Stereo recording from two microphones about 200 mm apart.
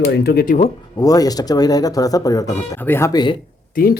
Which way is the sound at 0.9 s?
20° left (ahead or behind).